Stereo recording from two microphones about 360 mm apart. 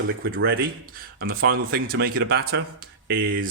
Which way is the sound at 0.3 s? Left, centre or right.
Right.